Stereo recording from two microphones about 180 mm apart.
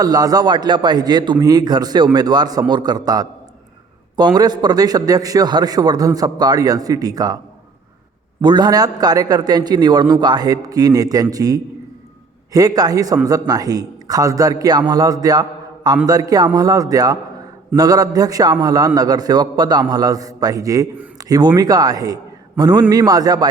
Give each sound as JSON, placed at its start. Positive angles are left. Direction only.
{"t": 0.0, "sound": "a man's voice", "side_deg": -20}
{"t": 8.4, "sound": "a man's voice", "side_deg": -25}